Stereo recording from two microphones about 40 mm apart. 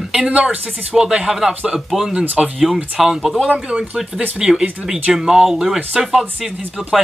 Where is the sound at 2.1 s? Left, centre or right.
Right.